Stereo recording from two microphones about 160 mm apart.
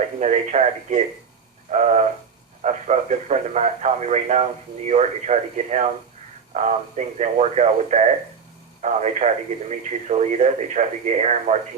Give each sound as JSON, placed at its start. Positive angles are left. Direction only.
{"t": 0.2, "sound": "speech", "side_deg": -45}